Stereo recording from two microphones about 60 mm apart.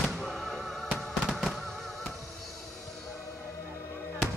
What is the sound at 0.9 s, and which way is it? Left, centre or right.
Music, centre.